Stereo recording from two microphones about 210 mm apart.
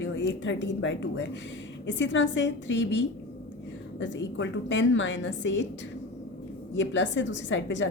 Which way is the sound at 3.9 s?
60° left (ahead or behind).